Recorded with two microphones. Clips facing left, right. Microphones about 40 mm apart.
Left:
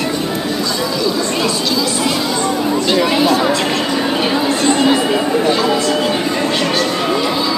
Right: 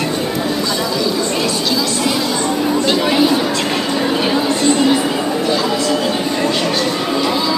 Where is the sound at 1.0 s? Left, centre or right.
Centre.